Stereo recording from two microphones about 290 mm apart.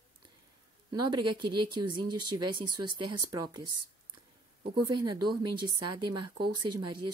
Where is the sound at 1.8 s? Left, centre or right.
Right.